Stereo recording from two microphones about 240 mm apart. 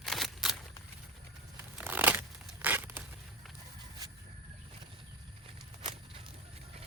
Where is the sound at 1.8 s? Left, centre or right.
Centre.